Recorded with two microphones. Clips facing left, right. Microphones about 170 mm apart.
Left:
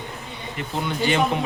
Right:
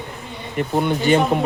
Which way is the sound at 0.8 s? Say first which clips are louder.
Right 6 dB; 55° right (ahead or behind).